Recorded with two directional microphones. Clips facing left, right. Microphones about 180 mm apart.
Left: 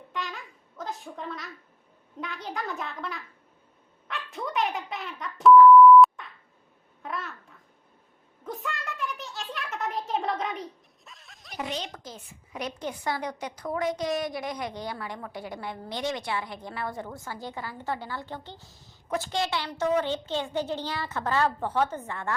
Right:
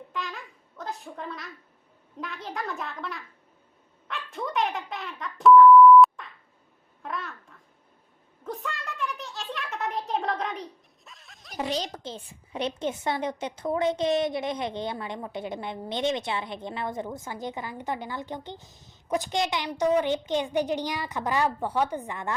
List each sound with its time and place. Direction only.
0.1 s babbling: centre (ahead or behind)
2.1 s a child's voice: centre (ahead or behind)
8.4 s a sound: centre (ahead or behind)
11.5 s a woman's voice: 35° right (ahead or behind); by 22.4 s 15° right (ahead or behind)